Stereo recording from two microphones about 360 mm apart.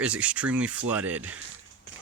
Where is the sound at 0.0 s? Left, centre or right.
Centre.